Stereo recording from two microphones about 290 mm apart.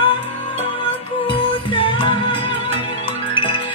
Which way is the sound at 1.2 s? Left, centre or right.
Centre.